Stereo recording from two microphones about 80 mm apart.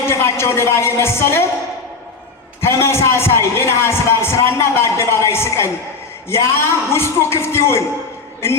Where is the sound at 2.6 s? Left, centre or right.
Left.